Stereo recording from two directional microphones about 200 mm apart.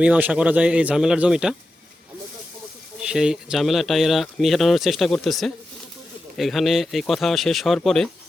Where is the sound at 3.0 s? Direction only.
5° right (ahead or behind).